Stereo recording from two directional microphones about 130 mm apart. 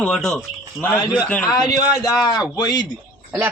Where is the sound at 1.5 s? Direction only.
30° left (ahead or behind).